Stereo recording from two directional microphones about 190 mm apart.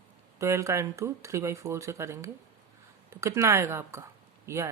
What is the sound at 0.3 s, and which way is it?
Speech, 15° right (ahead or behind).